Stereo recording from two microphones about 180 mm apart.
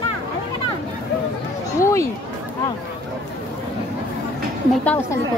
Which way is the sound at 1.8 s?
15° left (ahead or behind).